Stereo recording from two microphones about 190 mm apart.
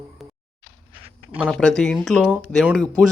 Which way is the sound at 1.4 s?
Centre (ahead or behind).